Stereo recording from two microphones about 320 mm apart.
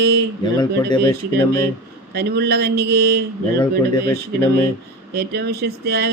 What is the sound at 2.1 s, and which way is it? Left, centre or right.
Speech, right.